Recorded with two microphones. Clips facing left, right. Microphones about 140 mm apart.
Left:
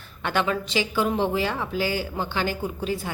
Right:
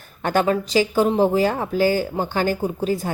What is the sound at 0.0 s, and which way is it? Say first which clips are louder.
Speech: right 5 dB; 40° right (ahead or behind).